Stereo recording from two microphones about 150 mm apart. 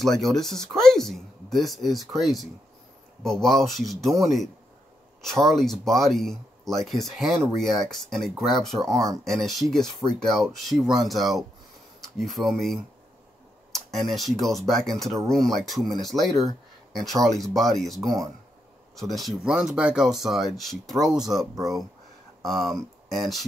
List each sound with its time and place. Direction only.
0.0 s speech: centre (ahead or behind)
5.2 s speech: centre (ahead or behind)
18.0 s speech: 25° right (ahead or behind)
18.9 s speech: centre (ahead or behind)